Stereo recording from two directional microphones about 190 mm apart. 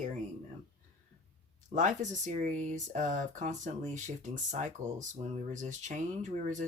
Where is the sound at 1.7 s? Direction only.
40° right (ahead or behind).